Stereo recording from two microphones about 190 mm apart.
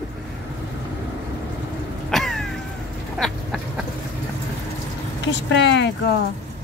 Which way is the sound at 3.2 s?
Centre (ahead or behind).